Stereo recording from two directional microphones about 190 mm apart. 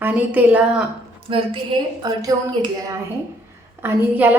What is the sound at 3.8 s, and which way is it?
Speech, 10° right (ahead or behind).